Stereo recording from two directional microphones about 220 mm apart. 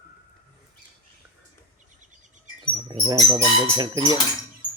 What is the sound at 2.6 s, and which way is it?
Speech, 20° right (ahead or behind).